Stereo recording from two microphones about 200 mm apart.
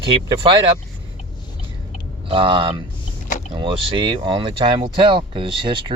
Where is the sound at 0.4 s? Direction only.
25° right (ahead or behind).